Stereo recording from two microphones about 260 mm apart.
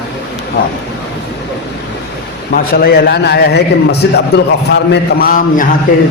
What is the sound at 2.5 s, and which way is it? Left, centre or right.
A man's voice, left.